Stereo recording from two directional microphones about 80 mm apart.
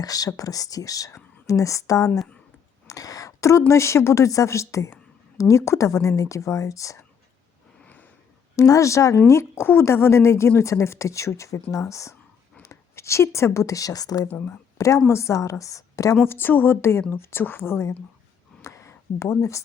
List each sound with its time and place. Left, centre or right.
0.0 s speech: left
2.8 s a sound: left
3.7 s speech: left
8.5 s a woman's voice: left
14.3 s speech: left
14.8 s speech: left
16.2 s speech: left
18.6 s a sound: left